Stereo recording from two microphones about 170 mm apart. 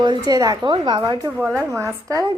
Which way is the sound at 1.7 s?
20° right (ahead or behind).